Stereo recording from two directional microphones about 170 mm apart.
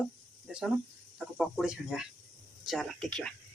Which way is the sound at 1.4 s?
5° right (ahead or behind).